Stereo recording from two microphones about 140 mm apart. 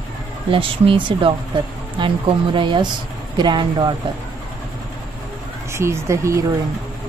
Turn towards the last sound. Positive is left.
turn(degrees=-20)  # may be behind; listen again after turning